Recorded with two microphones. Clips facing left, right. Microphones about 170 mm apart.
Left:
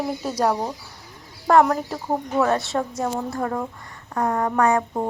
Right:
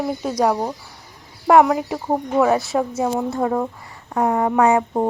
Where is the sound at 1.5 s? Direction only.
10° right (ahead or behind).